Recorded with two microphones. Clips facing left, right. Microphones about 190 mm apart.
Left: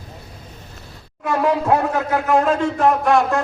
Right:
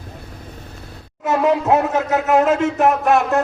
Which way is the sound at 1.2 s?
20° right (ahead or behind).